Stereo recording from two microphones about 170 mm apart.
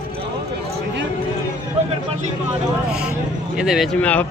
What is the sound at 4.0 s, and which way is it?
Speech, 10° left (ahead or behind).